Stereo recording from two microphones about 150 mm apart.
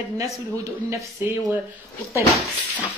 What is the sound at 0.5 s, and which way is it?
Speech, 20° right (ahead or behind).